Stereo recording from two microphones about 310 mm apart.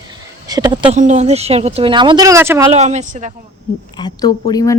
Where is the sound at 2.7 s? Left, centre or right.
Right.